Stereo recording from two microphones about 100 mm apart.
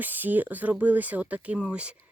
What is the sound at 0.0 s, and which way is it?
Speech, 20° right (ahead or behind).